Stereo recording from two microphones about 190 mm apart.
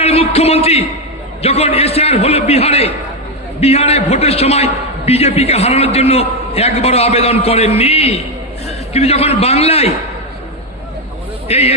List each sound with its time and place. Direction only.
0.0 s a man's voice: 30° left (ahead or behind)
11.4 s speech: 30° left (ahead or behind)